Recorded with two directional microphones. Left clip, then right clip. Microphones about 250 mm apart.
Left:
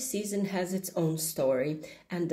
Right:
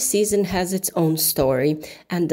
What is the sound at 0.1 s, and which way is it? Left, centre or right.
Speech, right.